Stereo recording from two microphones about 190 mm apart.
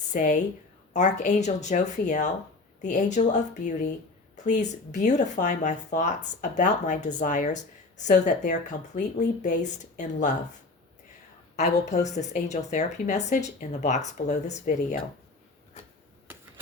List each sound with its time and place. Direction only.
0.1 s speech: 40° left (ahead or behind)
11.5 s speech: 35° left (ahead or behind)